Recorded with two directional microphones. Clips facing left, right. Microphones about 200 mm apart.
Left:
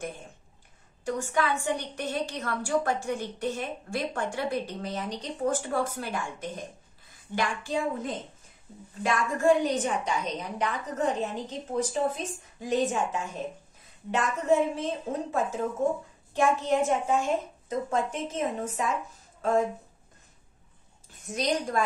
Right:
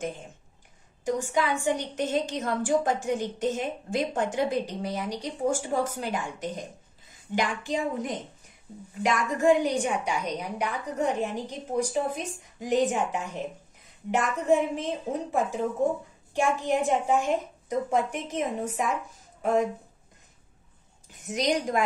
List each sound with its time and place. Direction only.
1.0 s a woman's voice: 15° right (ahead or behind)
16.3 s a woman's voice: 15° right (ahead or behind)
21.1 s a woman's voice: 15° right (ahead or behind)